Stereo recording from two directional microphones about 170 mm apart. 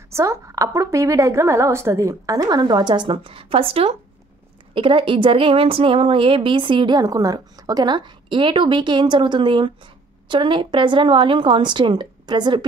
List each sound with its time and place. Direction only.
0.1 s a woman's voice: 20° right (ahead or behind)